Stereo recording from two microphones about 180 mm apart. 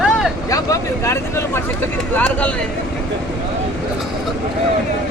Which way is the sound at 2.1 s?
5° left (ahead or behind).